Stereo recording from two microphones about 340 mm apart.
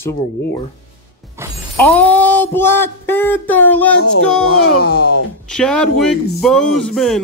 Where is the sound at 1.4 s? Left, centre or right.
Centre.